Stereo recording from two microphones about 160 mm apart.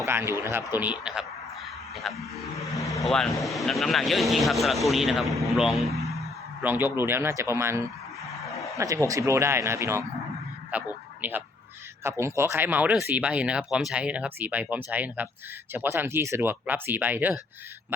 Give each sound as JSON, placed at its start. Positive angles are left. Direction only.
{"t": 0.0, "sound": "speech", "side_deg": -15}
{"t": 6.6, "sound": "speech", "side_deg": -10}